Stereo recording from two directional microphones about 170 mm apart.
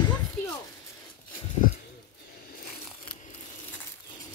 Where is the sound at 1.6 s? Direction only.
55° left (ahead or behind).